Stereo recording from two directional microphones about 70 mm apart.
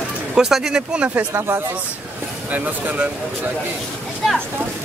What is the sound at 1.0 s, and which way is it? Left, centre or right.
Speech, right.